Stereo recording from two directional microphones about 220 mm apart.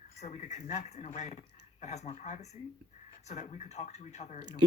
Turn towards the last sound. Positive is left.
turn(degrees=30)  # may be behind; listen again after turning